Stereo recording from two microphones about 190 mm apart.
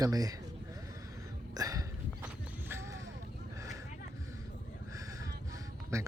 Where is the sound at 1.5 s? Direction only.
20° right (ahead or behind).